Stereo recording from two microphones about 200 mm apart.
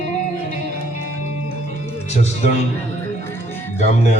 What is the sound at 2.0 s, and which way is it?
Music, 35° left (ahead or behind).